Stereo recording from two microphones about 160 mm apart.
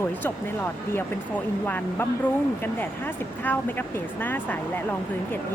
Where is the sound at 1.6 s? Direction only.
10° left (ahead or behind).